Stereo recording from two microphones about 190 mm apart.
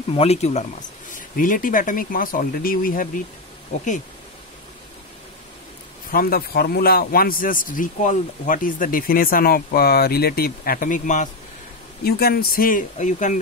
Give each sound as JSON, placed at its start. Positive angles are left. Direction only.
{"t": 0.1, "sound": "speech", "side_deg": 30}
{"t": 1.1, "sound": "speech", "side_deg": 45}
{"t": 6.1, "sound": "speech", "side_deg": 50}
{"t": 12.0, "sound": "speech", "side_deg": 55}